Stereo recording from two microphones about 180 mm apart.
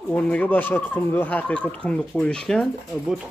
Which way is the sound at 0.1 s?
10° left (ahead or behind).